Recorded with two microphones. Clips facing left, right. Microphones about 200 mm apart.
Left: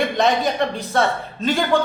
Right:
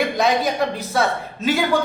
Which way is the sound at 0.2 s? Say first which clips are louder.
Left 1 dB; centre (ahead or behind).